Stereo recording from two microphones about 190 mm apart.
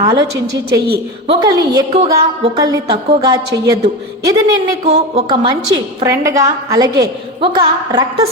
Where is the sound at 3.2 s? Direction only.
20° right (ahead or behind).